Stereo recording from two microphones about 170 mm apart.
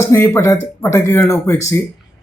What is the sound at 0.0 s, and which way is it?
Speech, 15° left (ahead or behind).